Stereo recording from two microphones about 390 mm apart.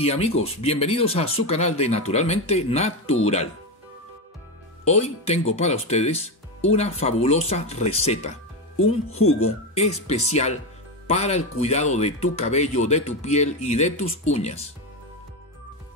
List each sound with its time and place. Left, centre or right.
0.0 s speech: centre
4.8 s speech: centre
9.2 s speech: left
9.8 s speech: centre